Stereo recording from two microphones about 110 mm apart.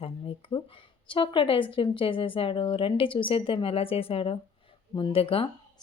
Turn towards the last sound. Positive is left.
turn(degrees=55)  # may be behind; listen again after turning